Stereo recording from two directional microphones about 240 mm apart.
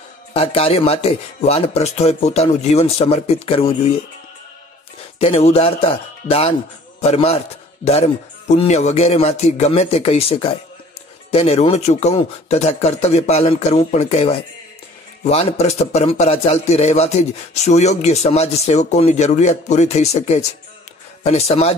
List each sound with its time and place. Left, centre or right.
0.3 s a man's voice: left
5.2 s a man's voice: left